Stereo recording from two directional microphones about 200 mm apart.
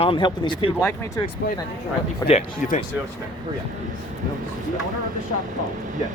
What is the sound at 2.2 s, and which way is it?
Speech, 15° left (ahead or behind).